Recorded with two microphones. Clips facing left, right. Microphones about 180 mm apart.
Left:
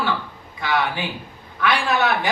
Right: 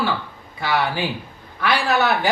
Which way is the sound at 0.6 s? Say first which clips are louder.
Right 1 dB; 35° right (ahead or behind).